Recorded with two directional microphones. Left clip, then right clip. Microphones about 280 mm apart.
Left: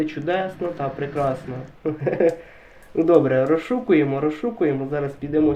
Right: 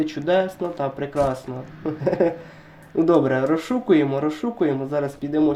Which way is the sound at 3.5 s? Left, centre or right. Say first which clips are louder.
Even; right.